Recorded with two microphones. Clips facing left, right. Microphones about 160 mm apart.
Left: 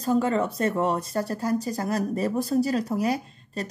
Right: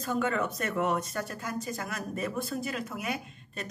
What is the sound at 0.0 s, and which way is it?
Speech, 30° left (ahead or behind).